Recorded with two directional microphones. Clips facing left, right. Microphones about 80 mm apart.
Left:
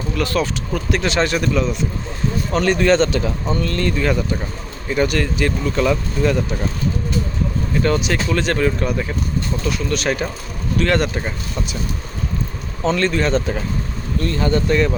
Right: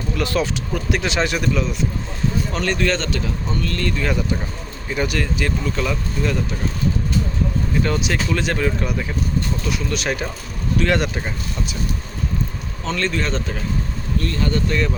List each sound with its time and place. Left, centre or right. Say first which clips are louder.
0.2 s speech: left 1 dB; centre
2.7 s speech: left 6 dB; left
4.0 s speech: left 3 dB; centre
7.8 s speech: left 4 dB; centre
11.2 s speech: left 1 dB; centre
13.0 s speech: left 3 dB; centre
14.2 s speech: left 3 dB; left